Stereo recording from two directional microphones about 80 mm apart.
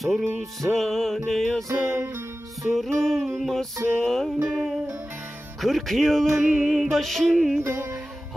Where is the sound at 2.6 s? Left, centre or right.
Centre.